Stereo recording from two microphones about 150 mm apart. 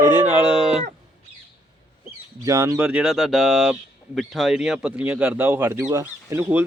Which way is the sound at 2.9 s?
5° right (ahead or behind).